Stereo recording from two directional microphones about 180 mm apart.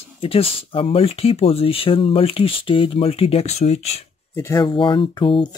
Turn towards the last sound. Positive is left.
turn(degrees=25)  # may be behind; listen again after turning